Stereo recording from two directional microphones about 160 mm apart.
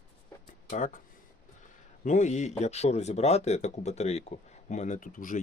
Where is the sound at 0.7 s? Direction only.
50° left (ahead or behind).